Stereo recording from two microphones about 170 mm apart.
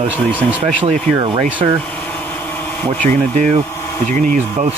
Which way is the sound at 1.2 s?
30° right (ahead or behind).